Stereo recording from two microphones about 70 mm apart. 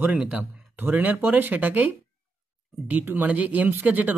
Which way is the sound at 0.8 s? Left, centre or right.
Right.